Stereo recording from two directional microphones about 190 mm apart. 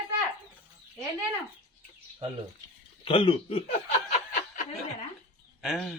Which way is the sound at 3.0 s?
25° left (ahead or behind).